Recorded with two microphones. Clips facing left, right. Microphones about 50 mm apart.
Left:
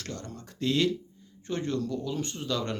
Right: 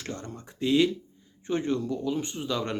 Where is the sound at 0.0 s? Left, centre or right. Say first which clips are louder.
Right 2 dB; right.